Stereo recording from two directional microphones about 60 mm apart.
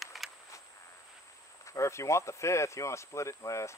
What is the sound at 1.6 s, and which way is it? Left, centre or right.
Speech, left.